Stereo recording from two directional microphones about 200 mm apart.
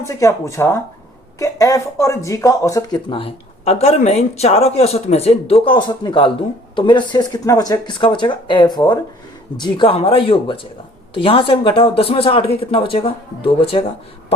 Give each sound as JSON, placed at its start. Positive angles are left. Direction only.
{"t": 0.0, "sound": "speech", "side_deg": 15}